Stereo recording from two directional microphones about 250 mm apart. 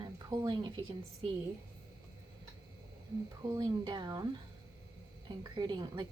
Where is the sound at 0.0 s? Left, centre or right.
Centre.